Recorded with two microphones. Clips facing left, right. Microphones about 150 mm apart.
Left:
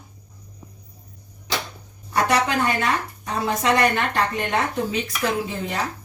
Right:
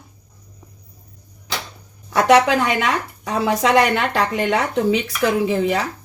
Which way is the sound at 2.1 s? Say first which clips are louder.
Right 7 dB; 90° right.